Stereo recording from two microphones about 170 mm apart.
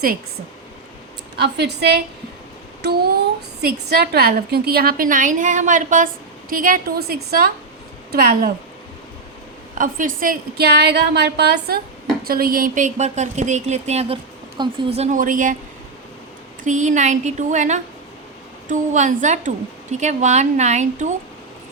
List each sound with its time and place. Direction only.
1.4 s a woman's voice: 75° right (ahead or behind); by 8.5 s 60° right (ahead or behind)
9.7 s a woman's voice: 50° right (ahead or behind); by 11.8 s 75° right (ahead or behind)
12.2 s a woman's voice: 60° right (ahead or behind)
16.6 s a woman's voice: 45° right (ahead or behind)